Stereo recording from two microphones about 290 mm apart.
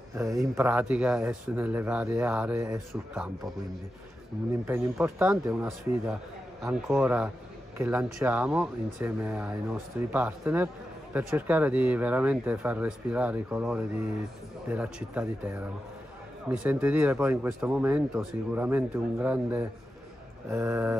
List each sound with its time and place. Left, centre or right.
0.2 s speech: centre
4.6 s speech: centre
20.4 s mantra: centre